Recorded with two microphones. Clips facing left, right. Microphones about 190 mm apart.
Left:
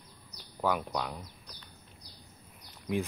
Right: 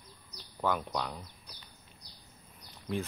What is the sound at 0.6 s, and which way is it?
Speech, 5° left (ahead or behind).